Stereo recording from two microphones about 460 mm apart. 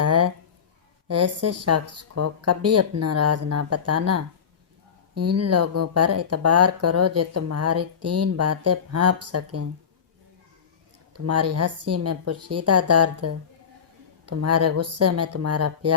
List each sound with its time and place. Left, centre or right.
0.0 s a sound: right
1.0 s speech: right
11.1 s speech: right